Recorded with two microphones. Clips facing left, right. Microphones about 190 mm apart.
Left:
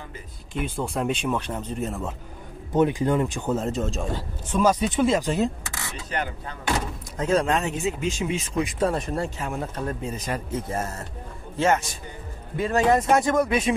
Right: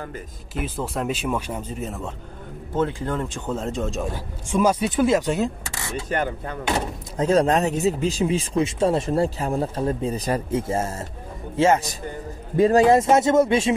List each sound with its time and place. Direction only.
0.6 s a man's voice: centre (ahead or behind)
2.7 s a man's voice: 15° left (ahead or behind); by 5.5 s centre (ahead or behind)
6.0 s speech: 45° right (ahead or behind)
7.2 s speech: 35° right (ahead or behind)